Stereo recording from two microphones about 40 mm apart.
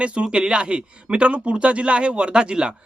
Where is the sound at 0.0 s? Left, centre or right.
Right.